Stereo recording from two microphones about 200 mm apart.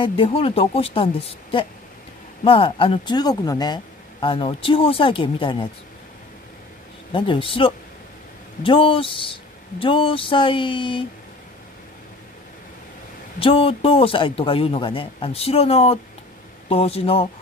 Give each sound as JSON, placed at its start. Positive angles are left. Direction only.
{"t": 0.0, "sound": "speech", "side_deg": 25}
{"t": 7.1, "sound": "speech", "side_deg": 25}
{"t": 13.4, "sound": "speech", "side_deg": 25}